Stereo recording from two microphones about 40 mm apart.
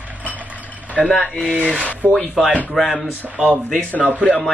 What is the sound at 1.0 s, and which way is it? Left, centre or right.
Speech, centre.